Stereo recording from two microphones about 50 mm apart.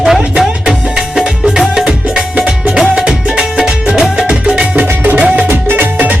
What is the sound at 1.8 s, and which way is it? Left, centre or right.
Music, right.